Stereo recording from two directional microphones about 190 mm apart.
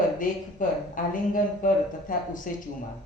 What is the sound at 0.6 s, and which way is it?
A woman's voice, 45° left (ahead or behind).